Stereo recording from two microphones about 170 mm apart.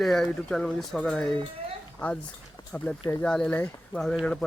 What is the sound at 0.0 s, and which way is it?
Speech, 5° left (ahead or behind).